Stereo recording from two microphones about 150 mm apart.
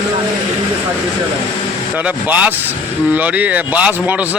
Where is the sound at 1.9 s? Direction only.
10° right (ahead or behind).